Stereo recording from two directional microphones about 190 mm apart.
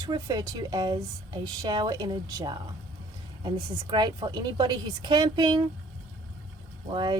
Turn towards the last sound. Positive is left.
turn(degrees=-25)  # may be behind; listen again after turning